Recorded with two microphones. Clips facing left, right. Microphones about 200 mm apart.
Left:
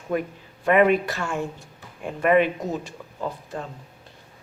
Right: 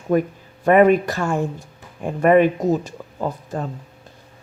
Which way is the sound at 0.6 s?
45° right (ahead or behind).